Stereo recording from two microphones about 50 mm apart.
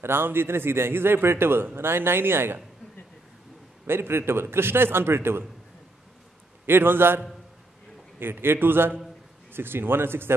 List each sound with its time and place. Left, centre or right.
0.0 s a man's voice: right
3.8 s a man's voice: right
6.6 s a man's voice: right
8.2 s a man's voice: right